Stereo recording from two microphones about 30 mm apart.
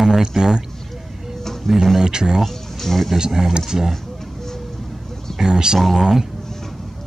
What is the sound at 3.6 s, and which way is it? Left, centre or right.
Speech, centre.